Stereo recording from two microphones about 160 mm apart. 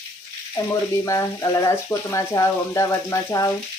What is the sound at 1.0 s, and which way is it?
Frying, 20° left (ahead or behind).